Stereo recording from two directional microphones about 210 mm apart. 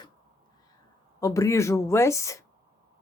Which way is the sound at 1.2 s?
15° left (ahead or behind).